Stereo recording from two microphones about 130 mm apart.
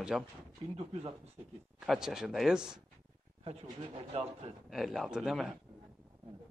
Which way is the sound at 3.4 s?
50° right (ahead or behind).